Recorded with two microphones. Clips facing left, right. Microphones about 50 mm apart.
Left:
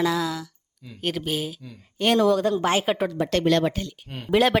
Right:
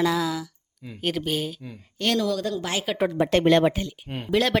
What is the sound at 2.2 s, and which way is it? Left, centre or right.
Speech, left.